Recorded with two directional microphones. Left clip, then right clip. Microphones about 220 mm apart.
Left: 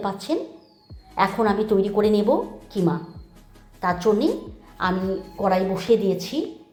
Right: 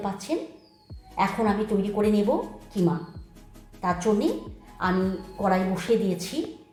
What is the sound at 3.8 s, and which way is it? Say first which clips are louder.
A woman's voice: left 4 dB; 15° left (ahead or behind).